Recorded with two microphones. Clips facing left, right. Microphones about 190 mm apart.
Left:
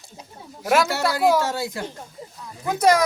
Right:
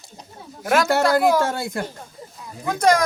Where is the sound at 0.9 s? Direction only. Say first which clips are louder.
Right 3 dB; 50° right (ahead or behind).